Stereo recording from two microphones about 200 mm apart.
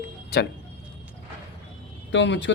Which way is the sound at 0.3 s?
50° left (ahead or behind).